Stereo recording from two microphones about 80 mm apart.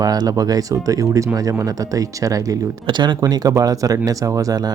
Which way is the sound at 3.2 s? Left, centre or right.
Right.